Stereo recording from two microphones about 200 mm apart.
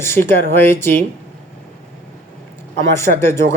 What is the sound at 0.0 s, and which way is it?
A man's voice, 10° left (ahead or behind).